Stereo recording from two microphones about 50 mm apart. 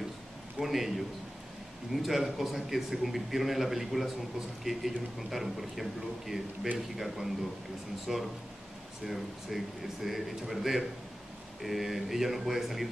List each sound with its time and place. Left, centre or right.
0.6 s a man's voice: centre